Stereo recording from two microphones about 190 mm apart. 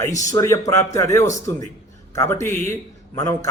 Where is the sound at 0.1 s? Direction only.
40° left (ahead or behind).